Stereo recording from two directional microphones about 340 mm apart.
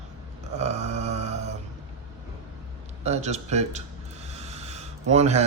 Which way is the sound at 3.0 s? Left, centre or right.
Centre.